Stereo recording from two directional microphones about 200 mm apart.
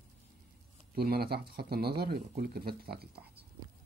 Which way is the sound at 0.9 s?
50° right (ahead or behind).